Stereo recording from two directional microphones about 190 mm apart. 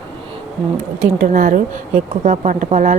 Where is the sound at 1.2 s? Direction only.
45° right (ahead or behind).